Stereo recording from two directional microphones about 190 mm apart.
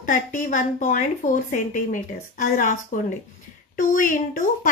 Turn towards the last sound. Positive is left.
turn(degrees=45)  # may be behind; listen again after turning